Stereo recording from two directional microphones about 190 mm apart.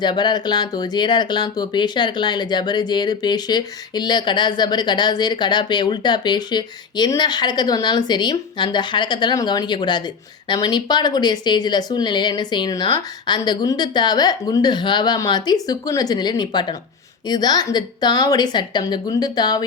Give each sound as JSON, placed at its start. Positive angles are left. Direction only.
{"t": 0.0, "sound": "speech", "side_deg": 25}